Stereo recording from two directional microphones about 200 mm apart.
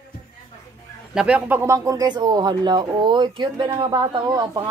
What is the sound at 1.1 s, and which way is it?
Speech, 5° right (ahead or behind).